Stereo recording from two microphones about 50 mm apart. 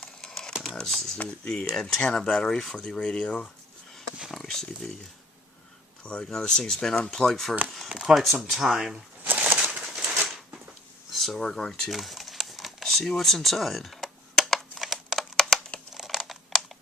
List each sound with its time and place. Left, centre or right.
0.0 s a sound: centre
0.8 s speech: centre
1.7 s speech: centre
4.3 s speech: centre
6.0 s speech: left
6.2 s speech: centre
7.9 s speech: centre
9.2 s bird: right
9.6 s a sound: centre
11.1 s a sound: centre
11.3 s speech: centre
11.8 s typing: centre
15.4 s crumpling: centre
15.9 s computer keyboard: centre